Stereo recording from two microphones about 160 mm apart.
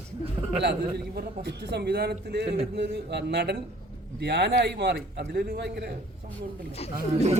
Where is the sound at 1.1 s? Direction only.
90° right.